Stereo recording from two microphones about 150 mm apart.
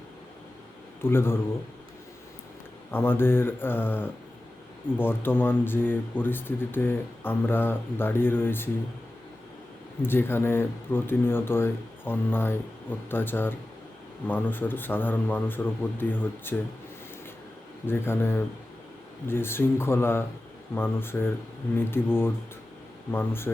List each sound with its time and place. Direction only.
1.0 s speech: 15° left (ahead or behind)
2.9 s speech: 15° left (ahead or behind)
10.0 s speech: 15° left (ahead or behind)
17.8 s speech: 15° left (ahead or behind)